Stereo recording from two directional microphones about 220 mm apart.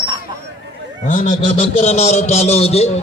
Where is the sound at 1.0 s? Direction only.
35° left (ahead or behind).